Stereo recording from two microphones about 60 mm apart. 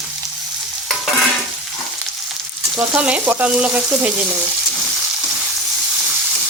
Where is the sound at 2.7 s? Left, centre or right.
Right.